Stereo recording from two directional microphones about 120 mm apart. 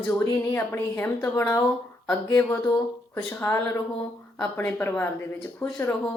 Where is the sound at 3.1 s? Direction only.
20° left (ahead or behind).